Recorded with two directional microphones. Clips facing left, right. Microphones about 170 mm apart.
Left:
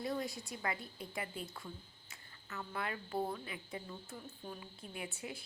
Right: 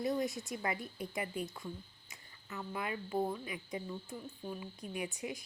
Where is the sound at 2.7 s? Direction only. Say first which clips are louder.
Right 3 dB; 15° right (ahead or behind).